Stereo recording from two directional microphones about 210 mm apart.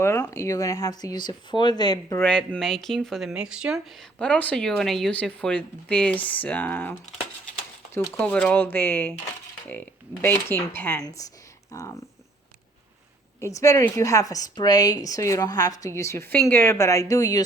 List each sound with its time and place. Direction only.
0.0 s a woman's voice: 15° left (ahead or behind)
2.2 s speech: 5° left (ahead or behind)
7.9 s a woman's voice: 5° left (ahead or behind)
13.4 s a woman's voice: 15° left (ahead or behind)